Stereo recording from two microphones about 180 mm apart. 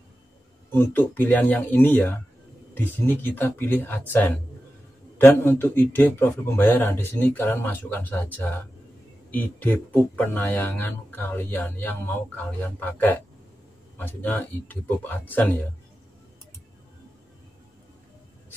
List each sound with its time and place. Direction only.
0.7 s speech: 10° left (ahead or behind)